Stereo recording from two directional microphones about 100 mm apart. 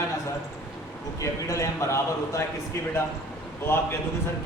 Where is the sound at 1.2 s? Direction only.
30° left (ahead or behind).